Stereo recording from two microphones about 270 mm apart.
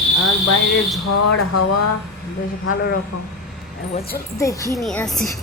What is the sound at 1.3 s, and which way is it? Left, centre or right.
Speech, left.